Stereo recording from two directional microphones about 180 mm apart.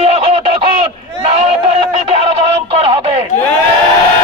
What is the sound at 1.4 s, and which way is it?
Speech, 35° right (ahead or behind).